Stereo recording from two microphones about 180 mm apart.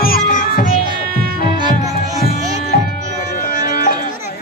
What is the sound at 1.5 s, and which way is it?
Music, 25° right (ahead or behind).